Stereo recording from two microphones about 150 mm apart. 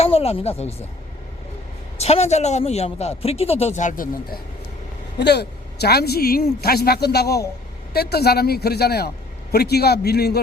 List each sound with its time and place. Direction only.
0.0 s speech: 40° left (ahead or behind)
2.0 s a man's voice: 45° left (ahead or behind); by 4.4 s 65° left (ahead or behind)
5.2 s a woman's voice: 90° left